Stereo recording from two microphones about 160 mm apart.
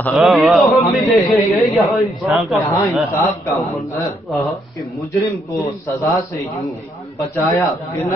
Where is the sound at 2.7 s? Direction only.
15° left (ahead or behind).